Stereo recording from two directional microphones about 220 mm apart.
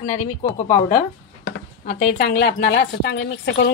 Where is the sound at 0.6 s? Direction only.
35° left (ahead or behind).